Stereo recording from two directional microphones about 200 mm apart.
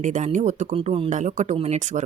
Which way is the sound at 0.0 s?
35° right (ahead or behind).